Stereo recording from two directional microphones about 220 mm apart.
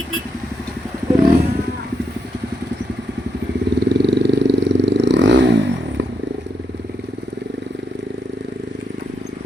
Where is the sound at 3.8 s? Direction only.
50° right (ahead or behind).